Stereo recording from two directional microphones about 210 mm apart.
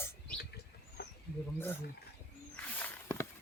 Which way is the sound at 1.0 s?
45° left (ahead or behind).